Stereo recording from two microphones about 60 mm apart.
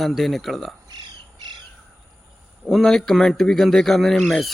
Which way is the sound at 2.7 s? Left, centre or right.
Centre.